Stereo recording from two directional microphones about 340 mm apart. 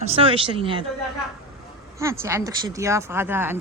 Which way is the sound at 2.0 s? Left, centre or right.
Centre.